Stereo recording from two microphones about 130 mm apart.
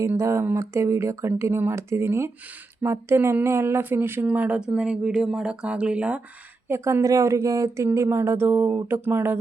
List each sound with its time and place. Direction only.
0.0 s speech: 20° right (ahead or behind)
6.7 s speech: 20° right (ahead or behind)